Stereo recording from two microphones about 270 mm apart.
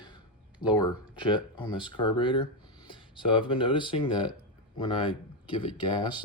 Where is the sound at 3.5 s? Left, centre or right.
Centre.